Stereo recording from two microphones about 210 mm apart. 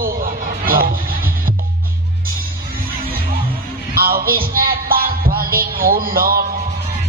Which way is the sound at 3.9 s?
45° right (ahead or behind).